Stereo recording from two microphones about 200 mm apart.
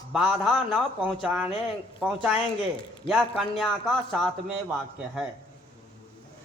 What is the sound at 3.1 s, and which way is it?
Speech, centre (ahead or behind).